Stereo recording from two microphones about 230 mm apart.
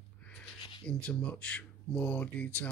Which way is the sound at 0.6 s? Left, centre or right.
Left.